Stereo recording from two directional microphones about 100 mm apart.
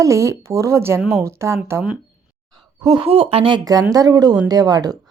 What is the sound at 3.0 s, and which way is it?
Speech, 75° right (ahead or behind).